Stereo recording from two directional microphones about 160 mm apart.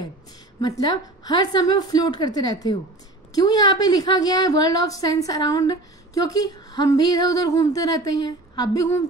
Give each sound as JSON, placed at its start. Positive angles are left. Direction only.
{"t": 0.6, "sound": "a woman's voice", "side_deg": 25}